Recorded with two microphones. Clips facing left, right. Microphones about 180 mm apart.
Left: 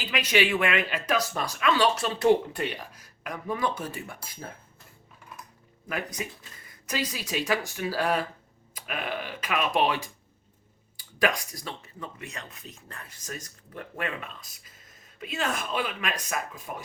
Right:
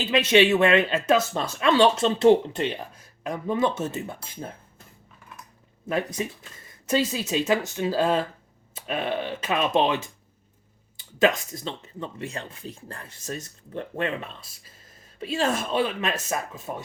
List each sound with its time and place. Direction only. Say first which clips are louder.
0.0 s speech: right 7 dB; 25° right (ahead or behind)
5.9 s speech: right 6 dB; 30° right (ahead or behind)